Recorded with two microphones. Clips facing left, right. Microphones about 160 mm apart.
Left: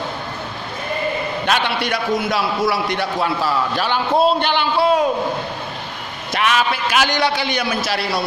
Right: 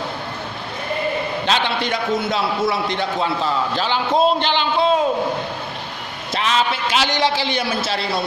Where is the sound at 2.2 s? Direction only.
25° right (ahead or behind).